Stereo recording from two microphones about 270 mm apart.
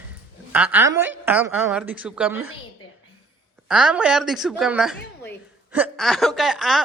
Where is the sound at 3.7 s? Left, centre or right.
Centre.